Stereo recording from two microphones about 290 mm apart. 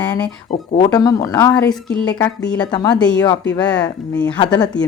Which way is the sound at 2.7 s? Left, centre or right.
Centre.